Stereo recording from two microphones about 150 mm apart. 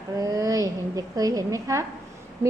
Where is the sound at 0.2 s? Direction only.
20° right (ahead or behind).